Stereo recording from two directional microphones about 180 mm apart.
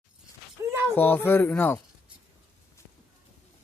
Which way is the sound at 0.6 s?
15° right (ahead or behind).